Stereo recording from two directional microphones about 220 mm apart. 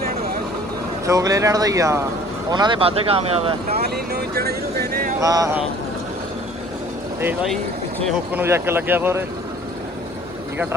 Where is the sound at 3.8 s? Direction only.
45° right (ahead or behind).